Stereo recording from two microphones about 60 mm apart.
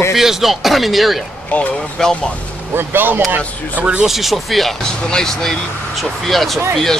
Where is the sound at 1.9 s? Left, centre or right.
Centre.